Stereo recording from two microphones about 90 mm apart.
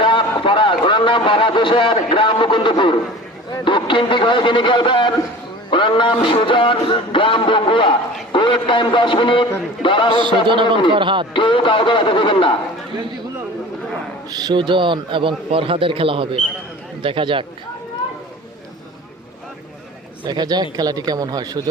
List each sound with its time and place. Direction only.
0.0 s a man's voice: 70° left (ahead or behind)
10.4 s a man's voice: 65° right (ahead or behind)
11.3 s speech: 70° left (ahead or behind)
14.3 s a man's voice: 55° right (ahead or behind); by 16.4 s 90° right
17.0 s a man's voice: 75° right (ahead or behind)
20.2 s speech: 50° right (ahead or behind)